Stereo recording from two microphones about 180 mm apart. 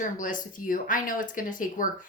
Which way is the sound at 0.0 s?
45° left (ahead or behind).